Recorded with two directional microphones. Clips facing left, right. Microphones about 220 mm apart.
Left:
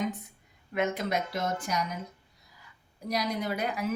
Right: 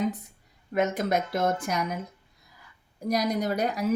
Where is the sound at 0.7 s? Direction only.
45° right (ahead or behind).